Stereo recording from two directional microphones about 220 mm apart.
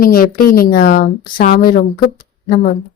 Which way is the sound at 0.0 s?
40° left (ahead or behind).